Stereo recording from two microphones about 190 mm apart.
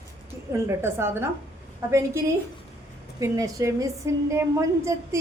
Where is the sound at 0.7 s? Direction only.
10° right (ahead or behind).